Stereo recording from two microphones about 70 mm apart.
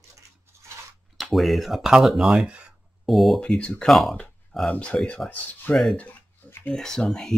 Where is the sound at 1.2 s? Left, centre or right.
Centre.